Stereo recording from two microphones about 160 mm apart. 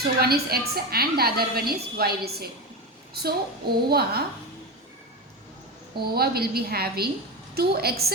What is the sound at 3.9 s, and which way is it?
Speech, 80° right.